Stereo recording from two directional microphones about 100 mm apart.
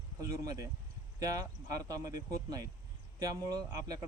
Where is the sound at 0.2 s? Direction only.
35° right (ahead or behind).